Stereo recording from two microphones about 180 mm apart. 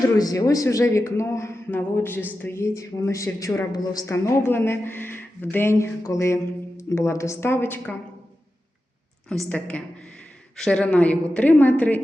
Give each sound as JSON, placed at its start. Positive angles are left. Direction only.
{"t": 0.0, "sound": "a woman's voice", "side_deg": 20}
{"t": 9.3, "sound": "a woman's voice", "side_deg": 5}